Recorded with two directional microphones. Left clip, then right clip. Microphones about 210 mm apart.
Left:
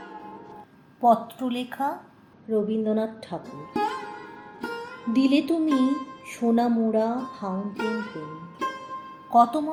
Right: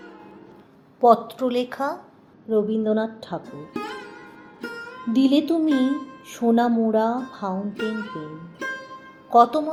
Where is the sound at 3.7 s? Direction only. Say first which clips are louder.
Left 6 dB; centre (ahead or behind).